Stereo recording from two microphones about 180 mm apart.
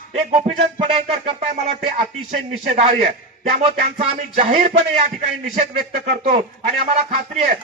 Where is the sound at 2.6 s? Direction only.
40° right (ahead or behind).